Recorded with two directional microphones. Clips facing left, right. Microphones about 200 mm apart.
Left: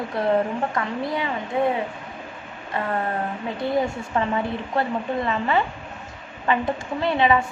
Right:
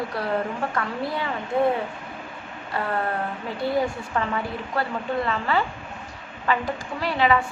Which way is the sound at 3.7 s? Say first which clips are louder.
Left 2 dB; 20° left (ahead or behind).